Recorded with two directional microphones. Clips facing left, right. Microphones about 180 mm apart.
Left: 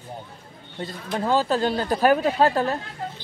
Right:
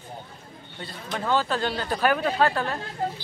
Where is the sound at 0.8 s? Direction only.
35° left (ahead or behind).